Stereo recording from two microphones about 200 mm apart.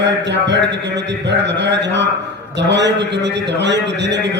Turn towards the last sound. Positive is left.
turn(degrees=-60)  # may be behind; listen again after turning